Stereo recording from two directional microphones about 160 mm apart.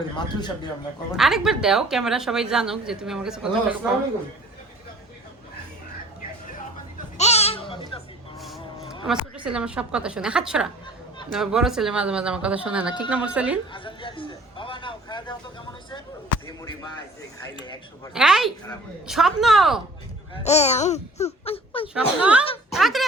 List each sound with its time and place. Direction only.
1.1 s a woman's voice: centre (ahead or behind)
7.2 s a sound: 40° left (ahead or behind)
9.0 s a woman's voice: 5° right (ahead or behind)
13.7 s a sound: 30° left (ahead or behind)
18.1 s a woman's voice: 5° right (ahead or behind)
20.3 s speech: 45° left (ahead or behind)
21.9 s speech: 5° right (ahead or behind)